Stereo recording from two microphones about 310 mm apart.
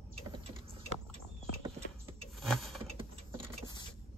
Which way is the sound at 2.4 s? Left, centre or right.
Centre.